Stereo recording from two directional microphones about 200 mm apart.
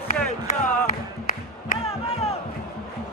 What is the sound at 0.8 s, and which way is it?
Music, 45° left (ahead or behind).